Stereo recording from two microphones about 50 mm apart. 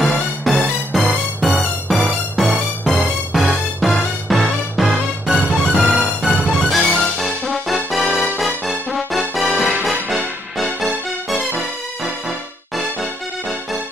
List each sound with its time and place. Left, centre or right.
0.0 s music: centre
12.0 s music: centre